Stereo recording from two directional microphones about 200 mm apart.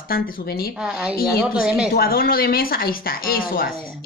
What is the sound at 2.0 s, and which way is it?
Speech, 45° left (ahead or behind).